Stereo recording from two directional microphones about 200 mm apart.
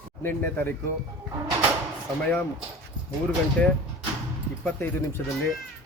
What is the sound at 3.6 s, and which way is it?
Speech, 10° left (ahead or behind).